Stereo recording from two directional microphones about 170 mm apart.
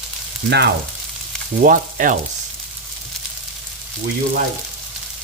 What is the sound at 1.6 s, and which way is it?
Frying, 50° right (ahead or behind).